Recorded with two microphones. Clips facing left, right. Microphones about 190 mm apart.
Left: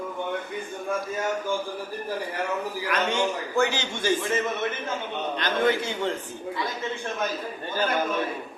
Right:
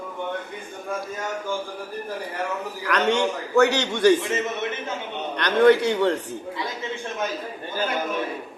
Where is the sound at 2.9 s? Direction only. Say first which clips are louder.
Right 5 dB; 70° right (ahead or behind).